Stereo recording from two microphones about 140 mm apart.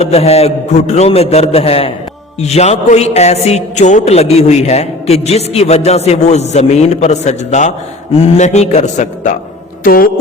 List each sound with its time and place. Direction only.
0.0 s a man's voice: 50° left (ahead or behind)
9.8 s speech: 90° left